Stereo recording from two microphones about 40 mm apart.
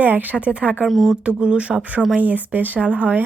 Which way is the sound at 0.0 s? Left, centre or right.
Right.